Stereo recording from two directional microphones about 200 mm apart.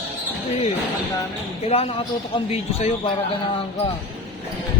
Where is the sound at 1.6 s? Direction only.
30° left (ahead or behind).